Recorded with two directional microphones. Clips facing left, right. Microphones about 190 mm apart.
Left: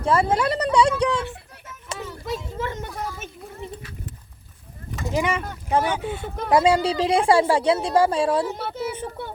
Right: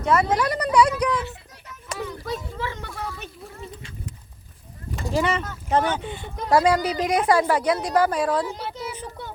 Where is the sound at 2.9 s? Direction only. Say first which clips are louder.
Left 2 dB; 20° left (ahead or behind).